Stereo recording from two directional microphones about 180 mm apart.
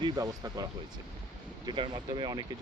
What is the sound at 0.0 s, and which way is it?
Speech, 20° right (ahead or behind).